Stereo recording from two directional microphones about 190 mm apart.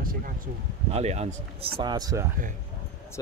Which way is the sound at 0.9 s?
35° right (ahead or behind).